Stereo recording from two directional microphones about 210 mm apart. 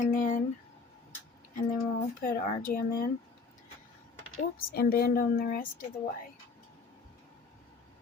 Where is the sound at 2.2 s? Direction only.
45° left (ahead or behind).